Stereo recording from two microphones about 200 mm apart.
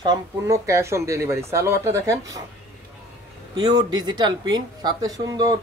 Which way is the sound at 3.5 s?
20° right (ahead or behind).